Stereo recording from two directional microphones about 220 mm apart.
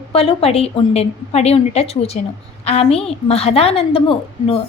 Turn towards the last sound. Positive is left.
turn(degrees=25)  # may be behind; listen again after turning